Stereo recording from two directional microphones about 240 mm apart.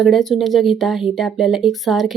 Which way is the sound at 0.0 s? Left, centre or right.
Centre.